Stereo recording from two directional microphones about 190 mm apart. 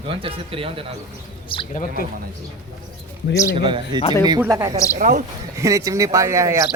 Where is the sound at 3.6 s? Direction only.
25° right (ahead or behind).